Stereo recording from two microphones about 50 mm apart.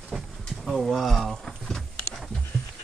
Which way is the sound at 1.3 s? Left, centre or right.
Centre.